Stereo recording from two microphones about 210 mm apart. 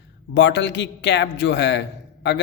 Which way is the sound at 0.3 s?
55° left (ahead or behind).